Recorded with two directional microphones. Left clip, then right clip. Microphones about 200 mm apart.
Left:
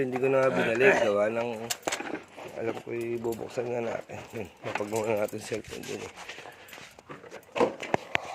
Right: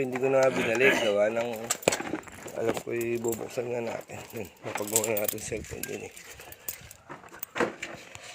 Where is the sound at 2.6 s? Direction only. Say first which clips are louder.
Right 3 dB; 20° right (ahead or behind).